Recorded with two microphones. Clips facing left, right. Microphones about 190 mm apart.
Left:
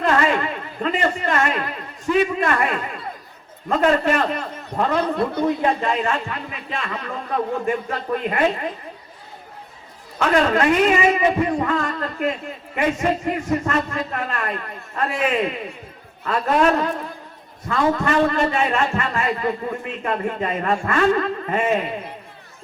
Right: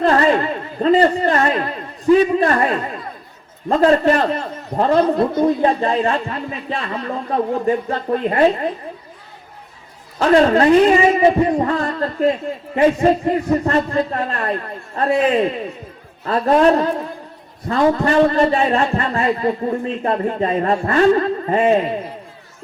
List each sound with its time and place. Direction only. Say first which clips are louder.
0.0 s a man's voice: right 4 dB; 35° right (ahead or behind)
10.2 s a man's voice: right 5 dB; 35° right (ahead or behind)